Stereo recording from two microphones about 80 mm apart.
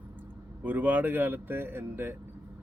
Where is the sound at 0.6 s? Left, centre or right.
Right.